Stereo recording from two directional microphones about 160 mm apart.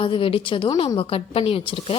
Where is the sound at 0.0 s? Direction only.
35° left (ahead or behind).